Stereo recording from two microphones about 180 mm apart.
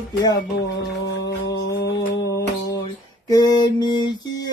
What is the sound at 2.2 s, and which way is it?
Mantra, 20° left (ahead or behind).